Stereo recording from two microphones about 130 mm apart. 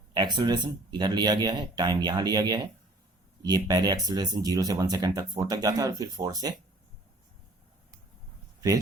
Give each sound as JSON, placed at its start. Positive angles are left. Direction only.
{"t": 0.1, "sound": "speech", "side_deg": -35}